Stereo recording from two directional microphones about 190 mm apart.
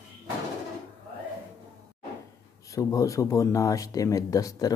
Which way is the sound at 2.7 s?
15° left (ahead or behind).